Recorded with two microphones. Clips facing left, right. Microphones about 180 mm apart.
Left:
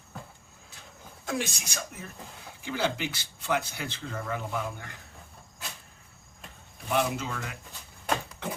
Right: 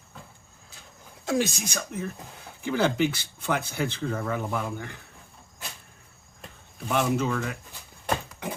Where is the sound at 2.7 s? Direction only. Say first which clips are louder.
Right 6 dB; 55° right (ahead or behind).